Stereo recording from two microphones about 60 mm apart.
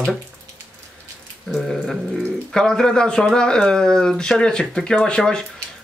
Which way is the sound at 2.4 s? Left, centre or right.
Centre.